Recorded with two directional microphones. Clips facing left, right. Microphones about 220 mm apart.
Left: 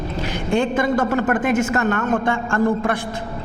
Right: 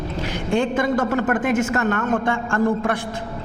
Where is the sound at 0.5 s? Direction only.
15° left (ahead or behind).